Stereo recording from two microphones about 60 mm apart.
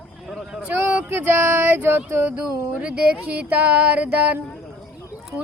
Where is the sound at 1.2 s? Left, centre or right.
Right.